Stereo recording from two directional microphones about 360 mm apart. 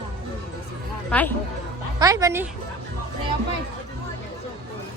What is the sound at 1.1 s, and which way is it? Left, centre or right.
Speech, centre.